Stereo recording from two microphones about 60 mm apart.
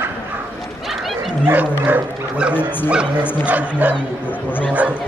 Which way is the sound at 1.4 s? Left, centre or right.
Right.